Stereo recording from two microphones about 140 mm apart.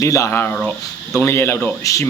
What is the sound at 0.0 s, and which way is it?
Speech, 20° left (ahead or behind).